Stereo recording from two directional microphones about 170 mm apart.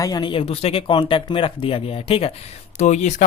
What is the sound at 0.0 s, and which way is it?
Speech, 25° left (ahead or behind).